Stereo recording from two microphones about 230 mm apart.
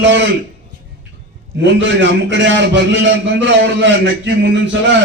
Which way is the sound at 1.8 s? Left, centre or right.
Right.